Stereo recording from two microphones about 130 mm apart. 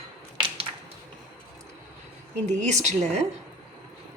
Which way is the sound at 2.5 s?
65° right (ahead or behind).